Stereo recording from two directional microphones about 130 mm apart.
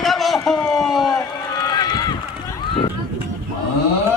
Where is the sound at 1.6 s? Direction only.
30° left (ahead or behind).